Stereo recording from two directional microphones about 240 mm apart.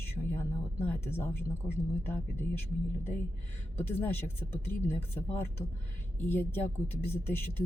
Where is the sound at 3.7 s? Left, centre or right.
Centre.